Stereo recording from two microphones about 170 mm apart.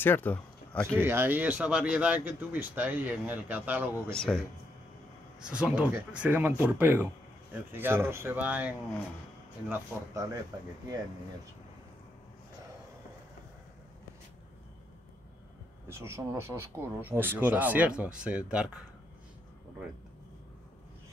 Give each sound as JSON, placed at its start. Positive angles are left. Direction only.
{"t": 0.0, "sound": "speech", "side_deg": 10}
{"t": 0.9, "sound": "speech", "side_deg": -15}
{"t": 4.1, "sound": "speech", "side_deg": 5}
{"t": 5.4, "sound": "speech", "side_deg": -5}
{"t": 15.9, "sound": "speech", "side_deg": -15}